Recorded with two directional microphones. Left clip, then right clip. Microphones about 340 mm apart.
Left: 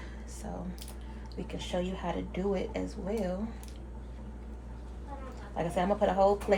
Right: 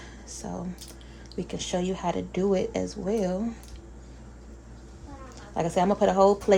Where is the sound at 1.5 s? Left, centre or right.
Right.